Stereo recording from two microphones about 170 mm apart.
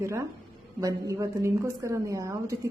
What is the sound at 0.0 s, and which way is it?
A woman's voice, 15° right (ahead or behind).